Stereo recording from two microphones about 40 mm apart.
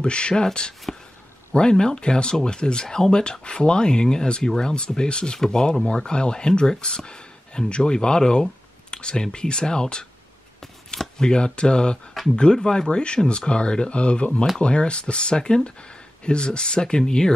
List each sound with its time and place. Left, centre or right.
0.0 s speech: left